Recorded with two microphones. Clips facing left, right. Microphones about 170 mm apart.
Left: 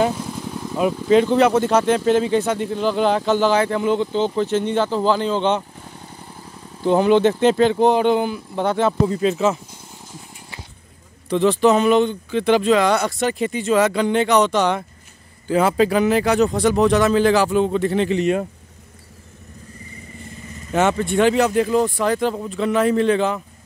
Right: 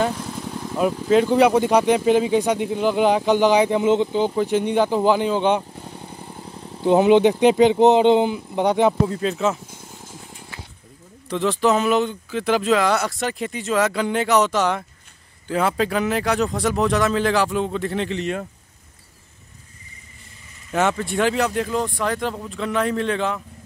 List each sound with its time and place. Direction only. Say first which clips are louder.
0.0 s vehicle: left 3 dB; 5° left (ahead or behind)
1.2 s speech: even; 10° right (ahead or behind)
9.0 s speech: left 3 dB; centre (ahead or behind)
11.2 s speech: left 4 dB; centre (ahead or behind)
21.1 s speech: left 4 dB; centre (ahead or behind)